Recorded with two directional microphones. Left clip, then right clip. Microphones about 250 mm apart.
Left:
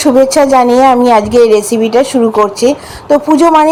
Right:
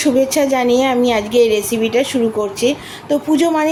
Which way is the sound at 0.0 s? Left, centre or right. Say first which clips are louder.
Left 7 dB; centre.